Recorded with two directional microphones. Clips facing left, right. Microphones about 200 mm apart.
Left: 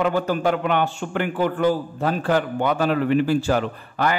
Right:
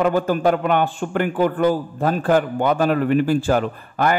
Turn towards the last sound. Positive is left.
turn(degrees=-50)  # may be behind; listen again after turning